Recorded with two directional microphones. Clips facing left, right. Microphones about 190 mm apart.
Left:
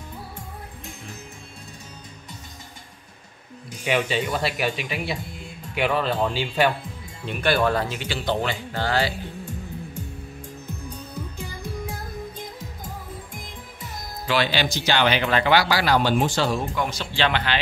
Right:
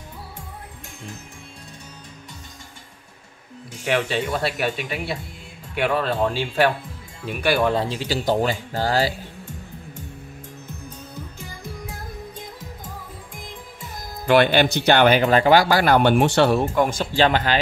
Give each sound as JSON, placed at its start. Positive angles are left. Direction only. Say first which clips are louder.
{"t": 3.8, "sound": "speech", "louder": "right 1 dB", "side_deg": 0}
{"t": 7.7, "sound": "speech", "louder": "right 3 dB", "side_deg": -30}
{"t": 14.2, "sound": "speech", "louder": "right 7 dB", "side_deg": -55}